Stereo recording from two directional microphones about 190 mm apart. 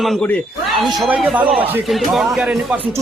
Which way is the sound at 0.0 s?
5° left (ahead or behind).